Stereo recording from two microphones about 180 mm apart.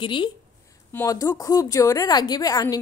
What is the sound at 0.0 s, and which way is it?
A woman's voice, 25° left (ahead or behind).